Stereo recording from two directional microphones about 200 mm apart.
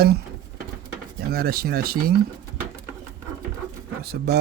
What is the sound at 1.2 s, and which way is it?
Speech, 50° right (ahead or behind).